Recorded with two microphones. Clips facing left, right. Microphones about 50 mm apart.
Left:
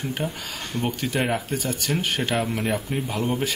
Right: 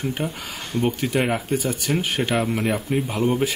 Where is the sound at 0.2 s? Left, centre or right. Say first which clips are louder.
Right 1 dB; centre.